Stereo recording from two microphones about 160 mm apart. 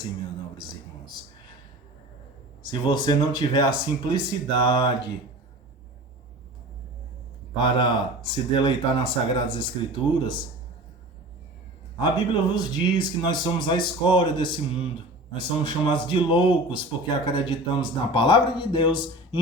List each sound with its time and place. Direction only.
2.6 s speech: 25° left (ahead or behind)
7.6 s speech: 30° left (ahead or behind)
12.5 s speech: 30° left (ahead or behind)